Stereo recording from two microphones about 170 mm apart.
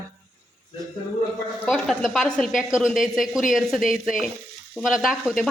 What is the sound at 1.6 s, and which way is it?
A woman's voice, centre (ahead or behind).